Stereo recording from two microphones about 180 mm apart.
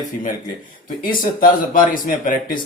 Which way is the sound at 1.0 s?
50° left (ahead or behind).